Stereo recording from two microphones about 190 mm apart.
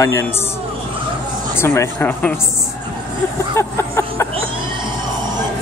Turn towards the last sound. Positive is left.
turn(degrees=15)  # may be behind; listen again after turning